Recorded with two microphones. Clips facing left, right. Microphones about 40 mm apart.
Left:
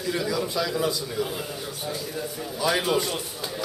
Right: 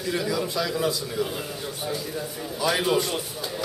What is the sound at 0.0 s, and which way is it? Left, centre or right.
A man's voice, centre.